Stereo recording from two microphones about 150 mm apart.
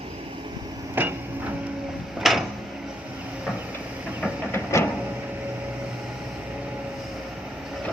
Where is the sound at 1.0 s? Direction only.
10° right (ahead or behind).